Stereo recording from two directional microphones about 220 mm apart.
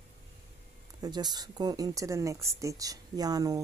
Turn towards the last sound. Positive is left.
turn(degrees=-15)  # may be behind; listen again after turning